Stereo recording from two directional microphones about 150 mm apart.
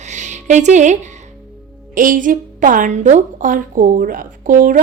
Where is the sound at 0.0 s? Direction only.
50° right (ahead or behind).